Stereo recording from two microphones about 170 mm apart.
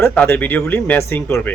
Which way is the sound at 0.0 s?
10° left (ahead or behind).